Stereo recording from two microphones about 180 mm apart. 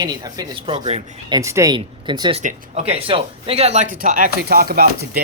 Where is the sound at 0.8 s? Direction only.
40° right (ahead or behind).